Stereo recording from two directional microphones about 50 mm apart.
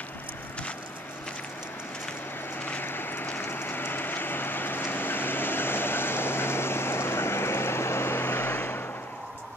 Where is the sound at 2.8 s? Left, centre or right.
Left.